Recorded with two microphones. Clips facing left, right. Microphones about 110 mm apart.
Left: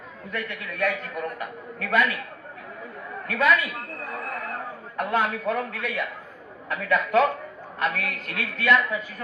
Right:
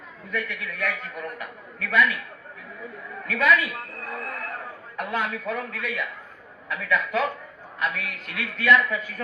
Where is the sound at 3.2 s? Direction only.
30° left (ahead or behind).